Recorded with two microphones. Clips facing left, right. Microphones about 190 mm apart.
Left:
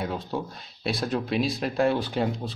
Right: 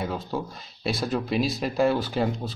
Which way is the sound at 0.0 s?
Centre (ahead or behind).